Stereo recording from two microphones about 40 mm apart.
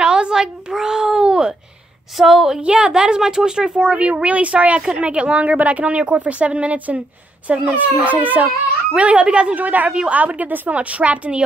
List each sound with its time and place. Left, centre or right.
0.0 s a sound: right
2.1 s speech: centre
2.6 s a woman's voice: right
8.9 s speech: right
9.6 s a woman's voice: right
10.7 s a woman's voice: right